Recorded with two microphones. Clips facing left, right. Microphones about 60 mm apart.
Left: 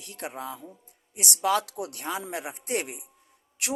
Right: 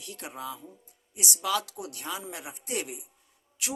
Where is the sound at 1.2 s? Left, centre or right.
Left.